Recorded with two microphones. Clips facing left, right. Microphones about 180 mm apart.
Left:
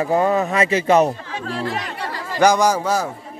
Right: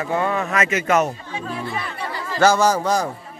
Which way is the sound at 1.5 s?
90° left.